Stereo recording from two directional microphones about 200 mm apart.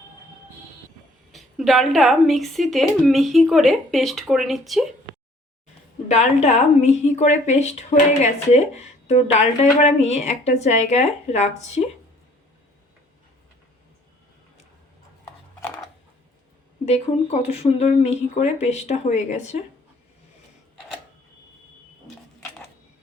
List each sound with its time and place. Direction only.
1.3 s a woman's voice: centre (ahead or behind)
6.1 s speech: 35° left (ahead or behind)
16.8 s speech: 35° left (ahead or behind)